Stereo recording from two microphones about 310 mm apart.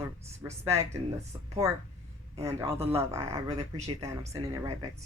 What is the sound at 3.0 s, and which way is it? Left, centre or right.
Speech, centre.